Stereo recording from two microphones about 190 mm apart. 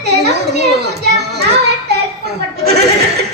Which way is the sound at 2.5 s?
55° right (ahead or behind).